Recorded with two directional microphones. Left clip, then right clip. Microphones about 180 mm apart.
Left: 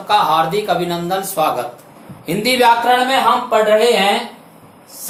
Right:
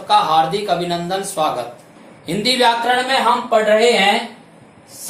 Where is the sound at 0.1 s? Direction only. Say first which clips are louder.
Even; 10° left (ahead or behind).